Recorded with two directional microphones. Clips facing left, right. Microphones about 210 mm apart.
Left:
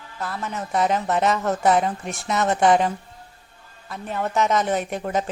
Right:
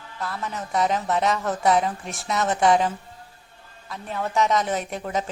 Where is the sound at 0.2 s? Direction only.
Centre (ahead or behind).